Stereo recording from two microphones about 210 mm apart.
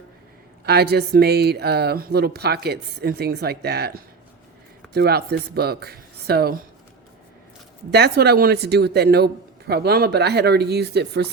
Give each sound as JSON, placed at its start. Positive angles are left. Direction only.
{"t": 0.6, "sound": "speech", "side_deg": -50}
{"t": 7.9, "sound": "speech", "side_deg": -50}